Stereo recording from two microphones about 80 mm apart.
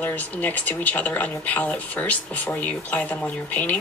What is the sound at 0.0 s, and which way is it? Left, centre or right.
Speech, centre.